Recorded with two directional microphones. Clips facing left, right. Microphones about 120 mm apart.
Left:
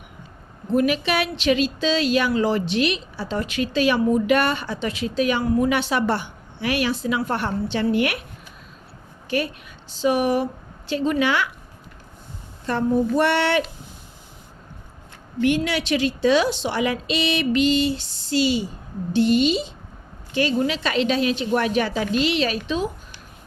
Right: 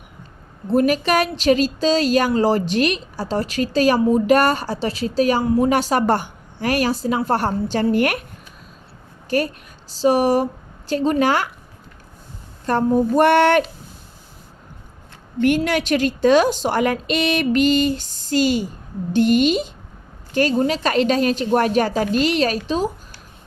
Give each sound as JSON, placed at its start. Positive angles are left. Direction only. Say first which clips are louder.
{"t": 0.7, "sound": "a woman's voice", "louder": "right 3 dB", "side_deg": -40}
{"t": 9.3, "sound": "a woman's voice", "louder": "right 4 dB", "side_deg": -40}
{"t": 12.6, "sound": "a woman's voice", "louder": "right 3 dB", "side_deg": -45}
{"t": 15.4, "sound": "a woman's voice", "louder": "right 3 dB", "side_deg": -45}